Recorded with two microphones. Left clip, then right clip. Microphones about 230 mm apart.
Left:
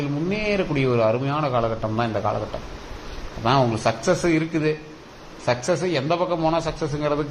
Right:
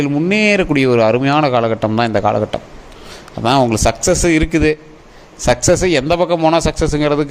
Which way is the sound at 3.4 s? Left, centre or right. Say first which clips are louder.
Right 7 dB; right.